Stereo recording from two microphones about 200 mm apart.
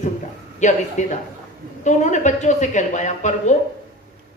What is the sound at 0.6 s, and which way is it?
A man's voice, 35° left (ahead or behind).